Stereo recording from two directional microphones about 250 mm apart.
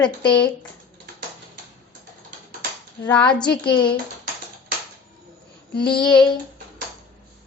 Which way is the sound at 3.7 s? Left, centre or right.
Centre.